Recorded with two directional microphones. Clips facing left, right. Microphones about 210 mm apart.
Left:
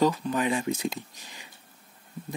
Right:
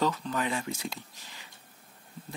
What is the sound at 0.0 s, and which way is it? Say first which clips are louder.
Speech: left 5 dB; 15° left (ahead or behind).